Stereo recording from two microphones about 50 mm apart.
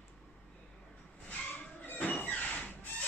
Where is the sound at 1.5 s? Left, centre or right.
Left.